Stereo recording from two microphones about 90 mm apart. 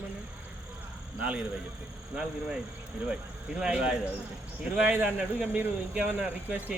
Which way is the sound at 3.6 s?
10° right (ahead or behind).